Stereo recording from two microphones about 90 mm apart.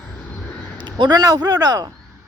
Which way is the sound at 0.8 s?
60° right (ahead or behind).